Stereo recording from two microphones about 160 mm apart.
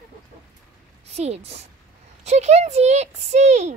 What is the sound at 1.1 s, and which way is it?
A woman's voice, 40° right (ahead or behind).